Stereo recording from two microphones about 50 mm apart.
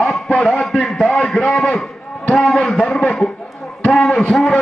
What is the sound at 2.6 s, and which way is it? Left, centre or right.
Speech, centre.